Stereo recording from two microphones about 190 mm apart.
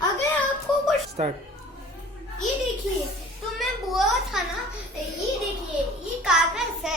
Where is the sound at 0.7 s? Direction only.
5° left (ahead or behind).